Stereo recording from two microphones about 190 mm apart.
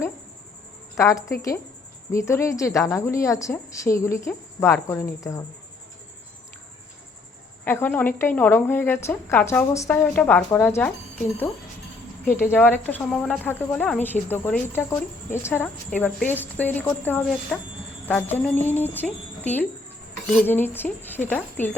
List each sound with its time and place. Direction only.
0.9 s speech: 15° left (ahead or behind)
7.6 s speech: 10° left (ahead or behind)
12.2 s speech: 10° left (ahead or behind)